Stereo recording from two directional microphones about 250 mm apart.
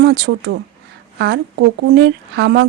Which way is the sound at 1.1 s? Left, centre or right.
Right.